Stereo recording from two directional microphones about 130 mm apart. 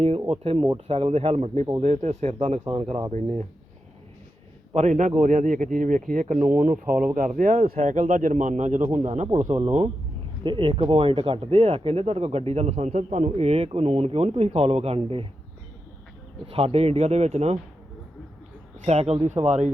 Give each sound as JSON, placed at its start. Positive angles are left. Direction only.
{"t": 0.0, "sound": "speech", "side_deg": -50}
{"t": 3.1, "sound": "speech", "side_deg": -70}
{"t": 4.7, "sound": "speech", "side_deg": -65}
{"t": 10.4, "sound": "speech", "side_deg": -40}
{"t": 16.5, "sound": "speech", "side_deg": -50}
{"t": 18.9, "sound": "speech", "side_deg": -55}